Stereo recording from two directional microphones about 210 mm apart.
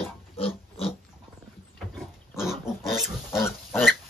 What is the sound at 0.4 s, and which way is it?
Pig, 25° left (ahead or behind).